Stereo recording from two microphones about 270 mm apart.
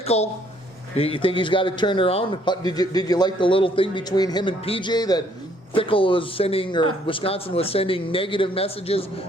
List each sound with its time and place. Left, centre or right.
0.0 s speech: left